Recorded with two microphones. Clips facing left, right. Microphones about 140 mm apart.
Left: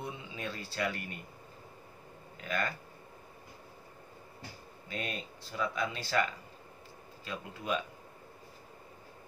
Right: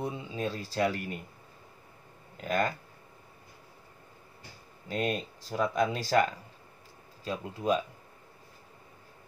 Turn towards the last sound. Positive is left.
turn(degrees=-35)  # may be behind; listen again after turning